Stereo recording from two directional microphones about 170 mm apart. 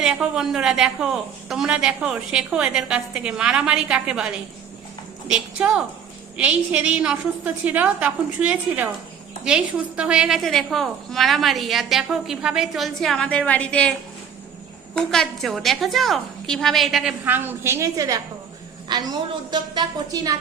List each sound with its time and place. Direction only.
0.0 s a woman's voice: 5° right (ahead or behind)
5.3 s a woman's voice: 5° right (ahead or behind)
14.9 s a woman's voice: 5° left (ahead or behind); by 20.3 s 25° right (ahead or behind)